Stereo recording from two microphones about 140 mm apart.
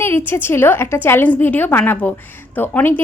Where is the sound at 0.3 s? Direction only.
15° left (ahead or behind).